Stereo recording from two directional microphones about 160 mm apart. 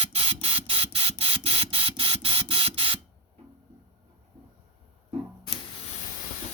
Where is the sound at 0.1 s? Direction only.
40° right (ahead or behind).